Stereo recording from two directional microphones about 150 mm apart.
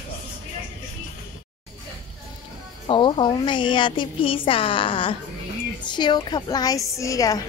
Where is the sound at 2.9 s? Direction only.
30° left (ahead or behind).